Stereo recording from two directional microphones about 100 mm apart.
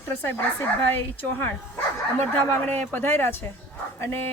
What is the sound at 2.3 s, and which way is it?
Speech, 20° left (ahead or behind).